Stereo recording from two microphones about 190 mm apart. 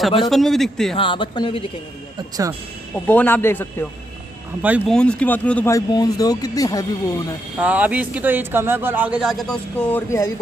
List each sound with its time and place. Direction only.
0.2 s a man's voice: centre (ahead or behind)
0.9 s speech: 25° left (ahead or behind)
3.1 s speech: 10° left (ahead or behind)
4.6 s a man's voice: 5° right (ahead or behind)
4.9 s speech: 5° left (ahead or behind)
7.6 s a man's voice: 10° right (ahead or behind); by 10.3 s 10° left (ahead or behind)